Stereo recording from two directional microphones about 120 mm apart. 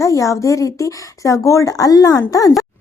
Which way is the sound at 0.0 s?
25° left (ahead or behind).